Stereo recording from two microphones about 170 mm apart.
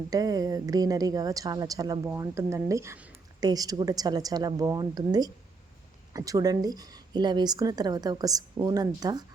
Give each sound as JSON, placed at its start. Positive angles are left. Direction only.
{"t": 0.1, "sound": "a woman's voice", "side_deg": -20}